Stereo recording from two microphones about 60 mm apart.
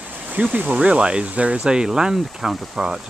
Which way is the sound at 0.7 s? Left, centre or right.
Centre.